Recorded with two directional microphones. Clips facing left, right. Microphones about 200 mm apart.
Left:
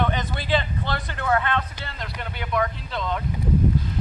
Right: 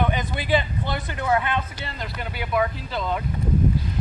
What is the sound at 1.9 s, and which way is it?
Speech, centre (ahead or behind).